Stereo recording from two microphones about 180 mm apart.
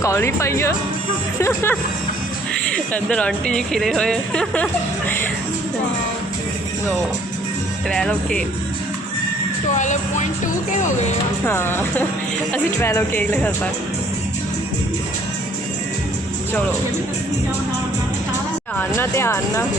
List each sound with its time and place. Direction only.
0.0 s speech: 15° left (ahead or behind)
7.9 s speech: 5° left (ahead or behind)
9.7 s speech: 45° left (ahead or behind)
11.4 s speech: 15° left (ahead or behind)
18.8 s speech: 15° left (ahead or behind)